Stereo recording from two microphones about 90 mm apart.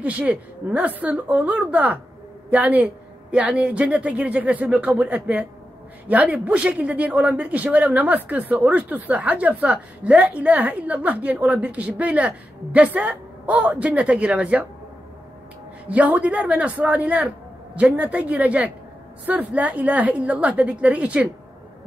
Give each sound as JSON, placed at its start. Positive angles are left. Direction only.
{"t": 0.0, "sound": "speech", "side_deg": -15}
{"t": 15.9, "sound": "speech", "side_deg": -15}